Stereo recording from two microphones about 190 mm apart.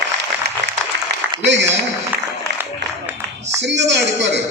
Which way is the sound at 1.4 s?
70° right (ahead or behind).